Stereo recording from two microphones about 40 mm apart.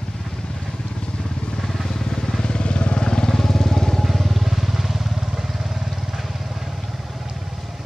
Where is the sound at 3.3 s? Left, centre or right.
Centre.